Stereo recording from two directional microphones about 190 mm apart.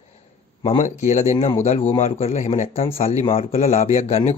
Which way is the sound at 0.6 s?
35° left (ahead or behind).